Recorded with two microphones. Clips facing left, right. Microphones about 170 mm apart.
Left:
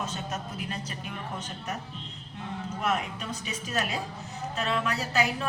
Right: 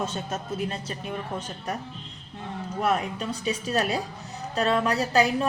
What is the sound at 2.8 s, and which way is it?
A woman's voice, 35° right (ahead or behind).